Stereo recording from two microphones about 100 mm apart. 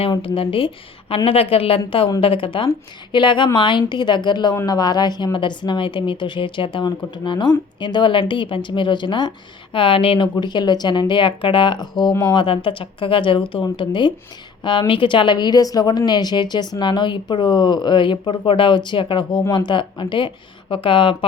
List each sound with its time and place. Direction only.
0.2 s a woman's voice: 65° left (ahead or behind)
1.1 s a woman's voice: 75° left (ahead or behind)
2.2 s a woman's voice: 60° left (ahead or behind)
10.3 s a woman's voice: 50° left (ahead or behind)